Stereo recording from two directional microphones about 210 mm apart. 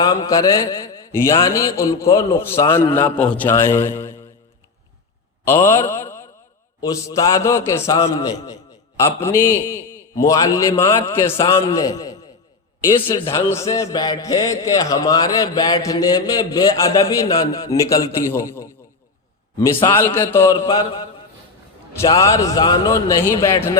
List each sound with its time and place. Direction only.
0.0 s a man's voice: 20° left (ahead or behind)
5.5 s a man's voice: 15° left (ahead or behind)
5.9 s a sound: 15° left (ahead or behind)
6.8 s a man's voice: 15° left (ahead or behind)
11.0 s a man's voice: 25° left (ahead or behind)
13.3 s a man's voice: 15° left (ahead or behind)
22.0 s a man's voice: 15° left (ahead or behind)